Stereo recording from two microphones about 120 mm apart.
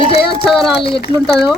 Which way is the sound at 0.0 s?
50° left (ahead or behind).